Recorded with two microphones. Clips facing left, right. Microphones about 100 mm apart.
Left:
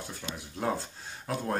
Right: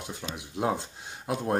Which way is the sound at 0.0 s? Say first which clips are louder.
Right 2 dB; 15° right (ahead or behind).